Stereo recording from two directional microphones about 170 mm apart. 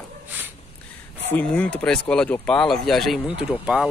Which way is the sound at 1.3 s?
10° left (ahead or behind).